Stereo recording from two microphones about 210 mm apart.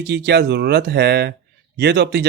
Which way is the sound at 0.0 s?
50° right (ahead or behind).